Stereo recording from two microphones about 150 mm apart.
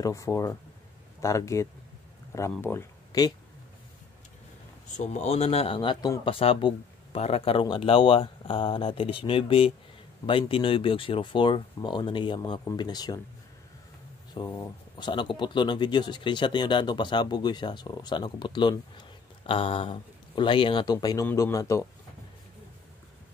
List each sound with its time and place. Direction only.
0.0 s speech: 20° left (ahead or behind)
4.9 s speech: 50° left (ahead or behind); by 13.2 s 25° left (ahead or behind)
14.3 s speech: 35° left (ahead or behind)